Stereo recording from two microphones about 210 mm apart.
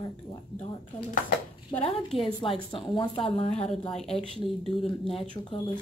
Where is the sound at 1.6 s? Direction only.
25° left (ahead or behind).